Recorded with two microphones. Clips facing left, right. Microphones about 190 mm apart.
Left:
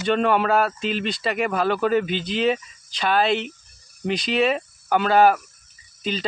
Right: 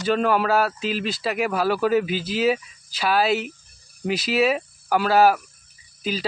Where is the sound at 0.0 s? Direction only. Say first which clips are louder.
Left 1 dB; centre (ahead or behind).